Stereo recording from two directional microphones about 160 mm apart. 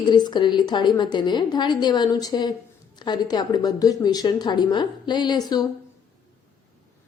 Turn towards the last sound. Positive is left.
turn(degrees=25)  # may be behind; listen again after turning